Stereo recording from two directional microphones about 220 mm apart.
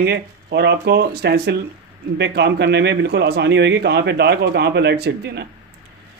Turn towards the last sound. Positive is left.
turn(degrees=-50)  # may be behind; listen again after turning